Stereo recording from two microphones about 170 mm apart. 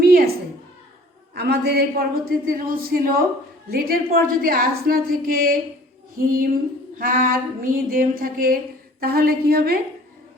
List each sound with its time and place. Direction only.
0.0 s a sound: 60° right (ahead or behind)
1.4 s a man's voice: 70° right (ahead or behind)
2.5 s a woman's voice: 55° right (ahead or behind)